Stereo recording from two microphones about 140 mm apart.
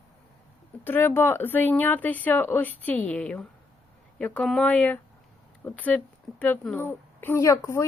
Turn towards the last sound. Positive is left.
turn(degrees=20)  # may be behind; listen again after turning